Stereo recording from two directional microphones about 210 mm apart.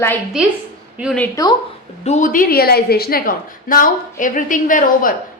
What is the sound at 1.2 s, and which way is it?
Speech, 15° left (ahead or behind).